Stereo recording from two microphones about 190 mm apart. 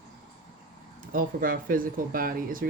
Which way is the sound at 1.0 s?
50° right (ahead or behind).